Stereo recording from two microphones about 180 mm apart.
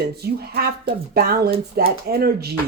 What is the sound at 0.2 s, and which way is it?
Speech, 60° right (ahead or behind).